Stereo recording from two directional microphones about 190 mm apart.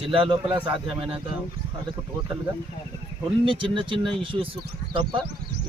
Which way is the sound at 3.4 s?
25° right (ahead or behind).